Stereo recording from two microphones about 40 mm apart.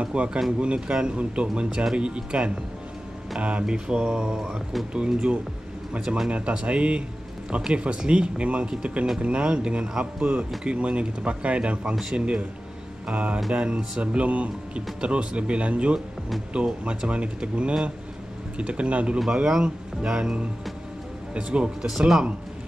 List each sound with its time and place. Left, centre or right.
0.0 s speech: right
6.3 s speech: right
19.4 s speech: centre
21.4 s speech: right
21.8 s speech: centre